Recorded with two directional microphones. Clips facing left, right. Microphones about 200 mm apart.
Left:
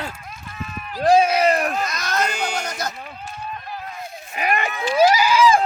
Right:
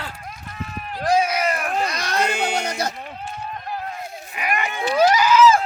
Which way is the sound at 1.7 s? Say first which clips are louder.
Right 1 dB; 30° right (ahead or behind).